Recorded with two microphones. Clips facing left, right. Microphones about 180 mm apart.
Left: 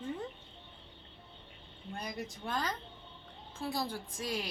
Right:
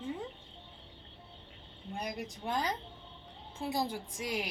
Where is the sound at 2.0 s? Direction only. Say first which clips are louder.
Right 2 dB; 15° right (ahead or behind).